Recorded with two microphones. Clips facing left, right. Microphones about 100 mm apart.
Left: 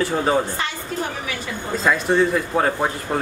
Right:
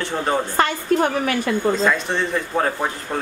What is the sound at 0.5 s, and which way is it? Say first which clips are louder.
Speech: right 8 dB; 55° right (ahead or behind).